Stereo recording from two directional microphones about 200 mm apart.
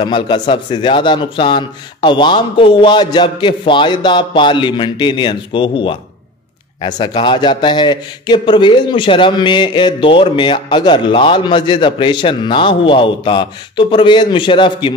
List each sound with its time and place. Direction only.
0.0 s a man's voice: 25° left (ahead or behind)